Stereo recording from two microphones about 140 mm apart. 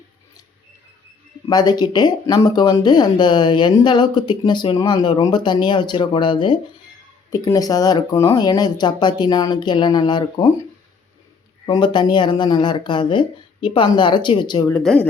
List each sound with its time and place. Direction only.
1.5 s speech: 30° left (ahead or behind)
11.6 s speech: 30° left (ahead or behind)
14.7 s speech: 10° left (ahead or behind)